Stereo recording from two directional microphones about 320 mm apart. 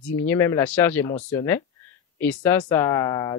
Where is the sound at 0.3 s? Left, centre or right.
Centre.